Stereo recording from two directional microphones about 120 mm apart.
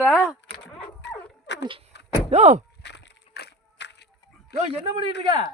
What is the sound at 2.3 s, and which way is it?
Speech, 65° right (ahead or behind).